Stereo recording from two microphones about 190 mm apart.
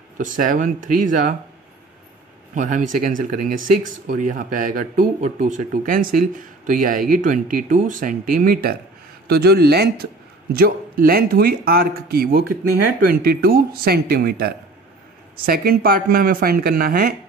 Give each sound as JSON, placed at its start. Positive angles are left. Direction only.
{"t": 0.2, "sound": "speech", "side_deg": -45}
{"t": 2.5, "sound": "speech", "side_deg": -40}